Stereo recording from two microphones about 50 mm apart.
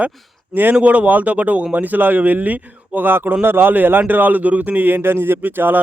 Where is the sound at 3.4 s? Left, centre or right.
Right.